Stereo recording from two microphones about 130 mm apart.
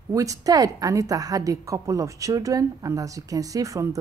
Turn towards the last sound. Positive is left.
turn(degrees=-25)  # may be behind; listen again after turning